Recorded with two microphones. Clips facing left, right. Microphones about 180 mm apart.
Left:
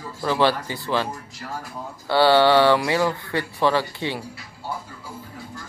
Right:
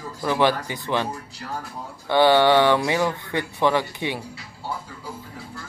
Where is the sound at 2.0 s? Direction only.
15° right (ahead or behind).